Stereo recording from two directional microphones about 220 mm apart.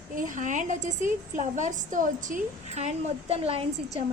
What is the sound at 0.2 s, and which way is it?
A woman's voice, 35° right (ahead or behind).